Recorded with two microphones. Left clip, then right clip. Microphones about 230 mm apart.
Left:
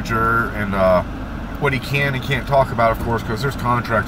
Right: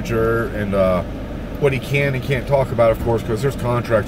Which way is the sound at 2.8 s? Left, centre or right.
Centre.